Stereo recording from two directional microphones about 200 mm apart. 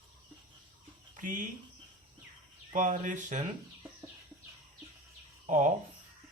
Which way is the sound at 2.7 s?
40° right (ahead or behind).